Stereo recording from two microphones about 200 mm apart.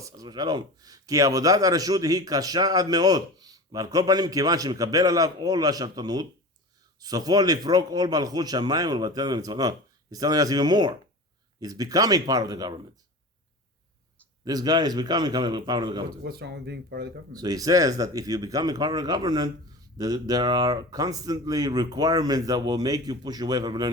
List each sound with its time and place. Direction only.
0.0 s speech: 20° right (ahead or behind)
14.4 s speech: 20° right (ahead or behind)
16.2 s speech: 55° right (ahead or behind)
17.3 s speech: 20° right (ahead or behind)